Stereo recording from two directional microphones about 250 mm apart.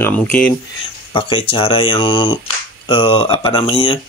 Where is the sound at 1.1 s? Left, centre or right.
Left.